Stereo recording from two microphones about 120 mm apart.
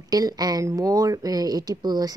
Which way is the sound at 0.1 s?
35° right (ahead or behind).